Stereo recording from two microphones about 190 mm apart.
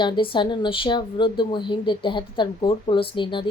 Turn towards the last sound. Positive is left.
turn(degrees=25)  # may be behind; listen again after turning